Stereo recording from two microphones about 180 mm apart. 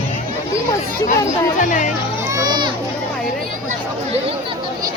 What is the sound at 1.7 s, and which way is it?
Speech, 45° left (ahead or behind).